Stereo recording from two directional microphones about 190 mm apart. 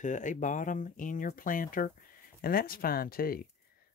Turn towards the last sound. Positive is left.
turn(degrees=50)  # may be behind; listen again after turning